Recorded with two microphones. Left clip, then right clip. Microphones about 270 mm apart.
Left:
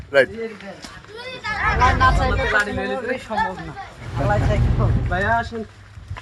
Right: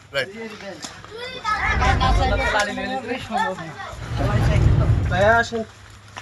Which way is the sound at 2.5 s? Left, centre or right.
Centre.